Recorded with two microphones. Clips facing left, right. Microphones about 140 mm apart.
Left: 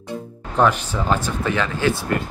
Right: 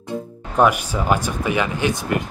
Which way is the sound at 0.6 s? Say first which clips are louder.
Right 1 dB; 10° right (ahead or behind).